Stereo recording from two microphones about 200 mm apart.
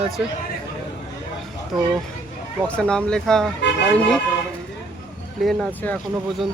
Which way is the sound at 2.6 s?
5° left (ahead or behind).